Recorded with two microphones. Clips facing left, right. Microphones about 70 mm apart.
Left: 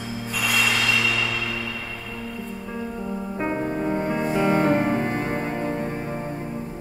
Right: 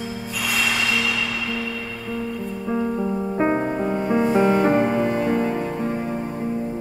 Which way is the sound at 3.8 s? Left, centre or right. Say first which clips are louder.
Right 1 dB; left.